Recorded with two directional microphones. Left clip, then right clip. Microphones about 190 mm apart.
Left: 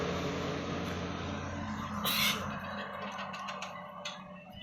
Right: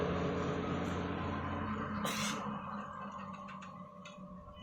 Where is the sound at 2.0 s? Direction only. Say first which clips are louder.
Left 9 dB; 35° right (ahead or behind).